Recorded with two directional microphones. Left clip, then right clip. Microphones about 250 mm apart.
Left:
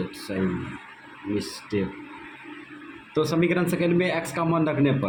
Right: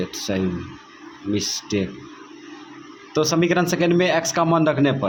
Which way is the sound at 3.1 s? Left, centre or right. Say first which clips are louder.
Right 4 dB; right.